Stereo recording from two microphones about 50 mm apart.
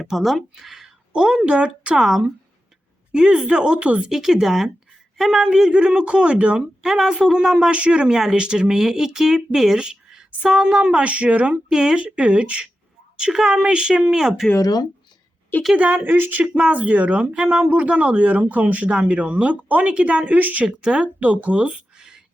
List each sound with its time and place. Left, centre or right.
0.0 s speech: centre; by 2.0 s right
3.1 s speech: centre
4.1 s a man's voice: centre
6.8 s speech: centre
11.0 s speech: right
11.7 s a woman's voice: centre
15.7 s speech: right
16.0 s speech: right
16.4 s speech: right
20.7 s speech: centre
21.2 s speech: right
21.9 s a sound: centre